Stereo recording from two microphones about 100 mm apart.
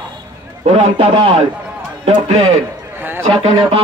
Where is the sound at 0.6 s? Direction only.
90° right; by 1.4 s 70° right (ahead or behind).